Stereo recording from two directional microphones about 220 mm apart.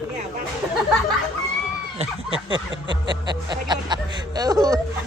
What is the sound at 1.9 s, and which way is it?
Speech, 25° right (ahead or behind).